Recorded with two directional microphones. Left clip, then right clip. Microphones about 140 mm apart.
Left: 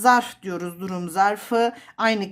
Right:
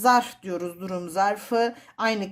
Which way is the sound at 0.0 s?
25° left (ahead or behind).